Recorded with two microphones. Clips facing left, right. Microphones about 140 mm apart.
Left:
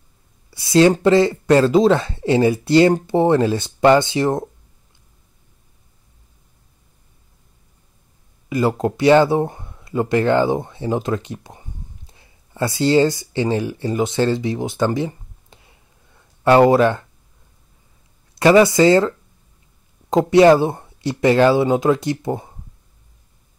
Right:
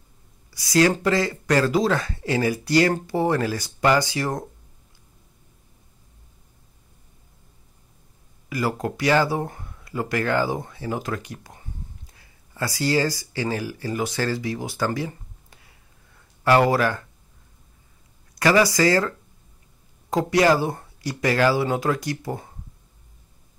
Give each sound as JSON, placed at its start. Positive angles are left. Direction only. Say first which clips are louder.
{"t": 0.5, "sound": "speech", "louder": "left 6 dB", "side_deg": 25}
{"t": 8.5, "sound": "speech", "louder": "left 7 dB", "side_deg": 25}
{"t": 18.3, "sound": "speech", "louder": "left 7 dB", "side_deg": 25}